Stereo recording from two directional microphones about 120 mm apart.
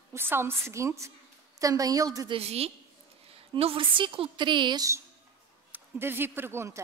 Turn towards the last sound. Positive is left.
turn(degrees=-20)  # may be behind; listen again after turning